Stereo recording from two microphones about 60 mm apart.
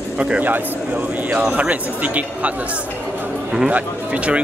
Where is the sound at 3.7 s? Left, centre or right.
Right.